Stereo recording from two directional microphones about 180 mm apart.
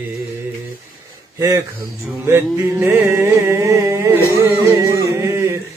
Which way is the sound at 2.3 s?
15° right (ahead or behind).